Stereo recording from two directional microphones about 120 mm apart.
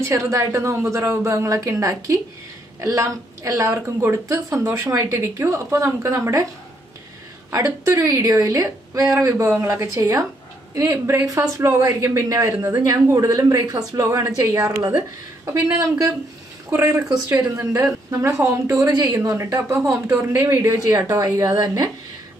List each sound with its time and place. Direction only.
0.0 s a woman's voice: 25° right (ahead or behind)
7.5 s a woman's voice: 30° right (ahead or behind)